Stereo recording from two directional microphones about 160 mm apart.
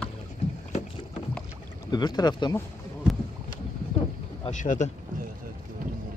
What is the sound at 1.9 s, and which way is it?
Speech, 25° left (ahead or behind).